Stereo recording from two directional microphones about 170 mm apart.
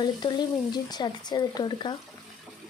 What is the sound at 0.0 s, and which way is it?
A woman's voice, 25° left (ahead or behind).